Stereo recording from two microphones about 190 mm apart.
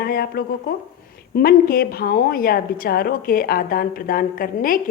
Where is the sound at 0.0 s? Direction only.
55° left (ahead or behind).